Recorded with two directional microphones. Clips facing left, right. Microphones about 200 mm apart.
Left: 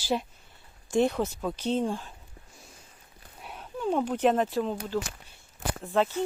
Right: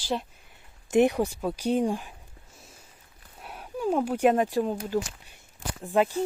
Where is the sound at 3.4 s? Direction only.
10° right (ahead or behind).